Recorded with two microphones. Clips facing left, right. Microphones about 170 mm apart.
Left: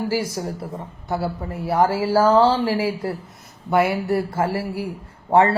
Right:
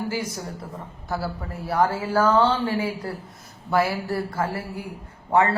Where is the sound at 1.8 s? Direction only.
30° left (ahead or behind).